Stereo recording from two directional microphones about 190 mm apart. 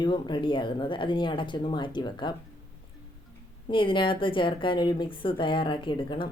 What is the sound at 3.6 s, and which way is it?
A woman's voice, 25° left (ahead or behind).